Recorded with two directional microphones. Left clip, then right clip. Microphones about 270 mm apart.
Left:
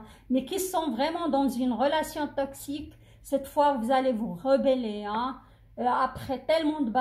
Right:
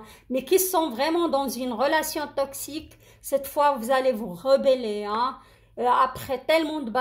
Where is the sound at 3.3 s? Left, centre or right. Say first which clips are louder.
Right 2 dB; right.